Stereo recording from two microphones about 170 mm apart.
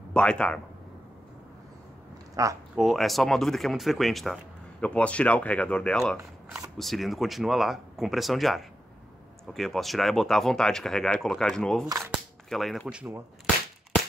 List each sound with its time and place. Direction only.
0.1 s speech: 5° left (ahead or behind)
2.4 s speech: 20° right (ahead or behind)
2.7 s speech: centre (ahead or behind)